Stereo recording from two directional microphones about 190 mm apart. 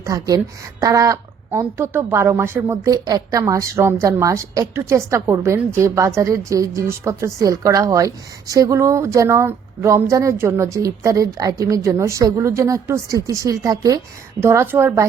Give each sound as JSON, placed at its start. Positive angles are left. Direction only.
{"t": 0.0, "sound": "a woman's voice", "side_deg": -20}